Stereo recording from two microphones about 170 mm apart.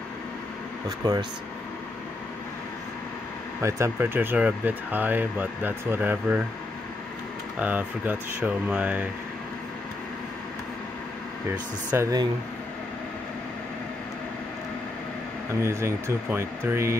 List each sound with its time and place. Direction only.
0.8 s speech: 20° right (ahead or behind)
3.6 s speech: 15° right (ahead or behind)
7.5 s speech: 10° right (ahead or behind)
11.9 s speech: 20° right (ahead or behind)
15.6 s speech: 15° right (ahead or behind)